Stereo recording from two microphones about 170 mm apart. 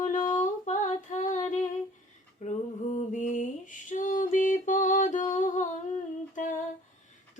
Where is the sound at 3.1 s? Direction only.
45° left (ahead or behind).